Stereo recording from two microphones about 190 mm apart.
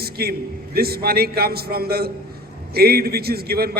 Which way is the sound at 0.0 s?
55° right (ahead or behind).